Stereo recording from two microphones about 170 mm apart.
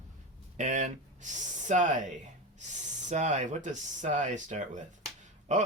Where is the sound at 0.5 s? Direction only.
45° right (ahead or behind).